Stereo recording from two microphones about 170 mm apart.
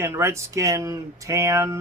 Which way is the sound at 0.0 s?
15° right (ahead or behind).